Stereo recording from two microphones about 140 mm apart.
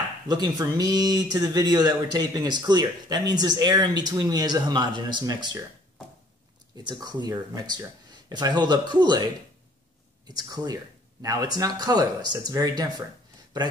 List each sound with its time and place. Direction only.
0.3 s speech: 30° right (ahead or behind)
6.8 s speech: 30° right (ahead or behind)